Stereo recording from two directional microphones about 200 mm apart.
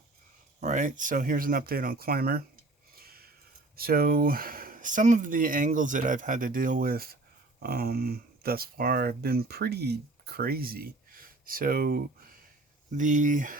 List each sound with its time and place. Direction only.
0.6 s speech: 40° right (ahead or behind)
2.9 s a sound: 50° right (ahead or behind)
3.8 s speech: 50° right (ahead or behind)